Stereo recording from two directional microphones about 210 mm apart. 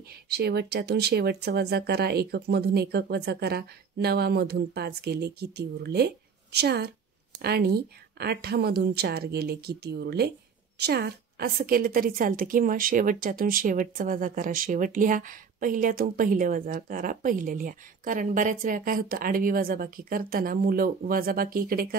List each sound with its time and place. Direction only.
0.1 s a woman's voice: 50° right (ahead or behind)